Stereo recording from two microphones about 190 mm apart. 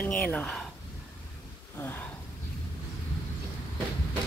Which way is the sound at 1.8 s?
10° left (ahead or behind).